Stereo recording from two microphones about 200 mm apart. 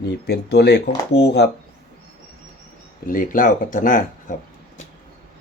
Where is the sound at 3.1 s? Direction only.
45° left (ahead or behind).